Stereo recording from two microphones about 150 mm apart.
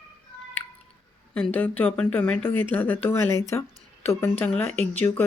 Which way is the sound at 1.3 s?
10° left (ahead or behind).